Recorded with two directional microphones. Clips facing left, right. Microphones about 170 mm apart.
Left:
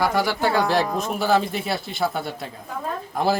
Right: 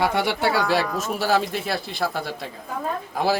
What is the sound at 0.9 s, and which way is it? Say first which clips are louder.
A woman's voice: left 1 dB; centre (ahead or behind).